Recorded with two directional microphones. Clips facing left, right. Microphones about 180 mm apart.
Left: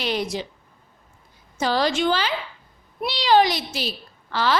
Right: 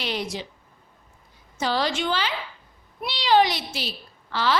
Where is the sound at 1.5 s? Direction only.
45° left (ahead or behind).